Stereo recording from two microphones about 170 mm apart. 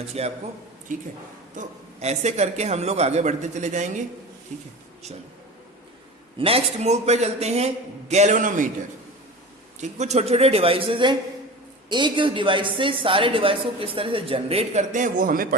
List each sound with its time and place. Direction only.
0.1 s a woman's voice: 35° right (ahead or behind)
1.5 s a woman's voice: 40° right (ahead or behind)
6.4 s a woman's voice: 35° right (ahead or behind)
9.8 s a woman's voice: 40° right (ahead or behind)